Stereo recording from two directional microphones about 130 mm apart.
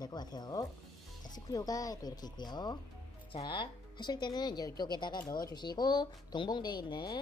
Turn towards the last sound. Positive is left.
turn(degrees=30)  # may be behind; listen again after turning